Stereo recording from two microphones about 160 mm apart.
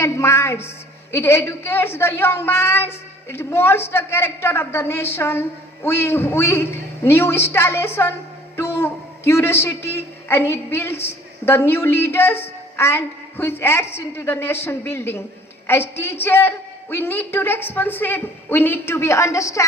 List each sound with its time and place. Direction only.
0.0 s a woman's voice: 15° left (ahead or behind)